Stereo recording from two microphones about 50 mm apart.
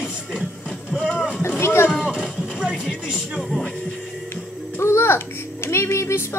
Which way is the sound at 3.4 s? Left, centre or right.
Centre.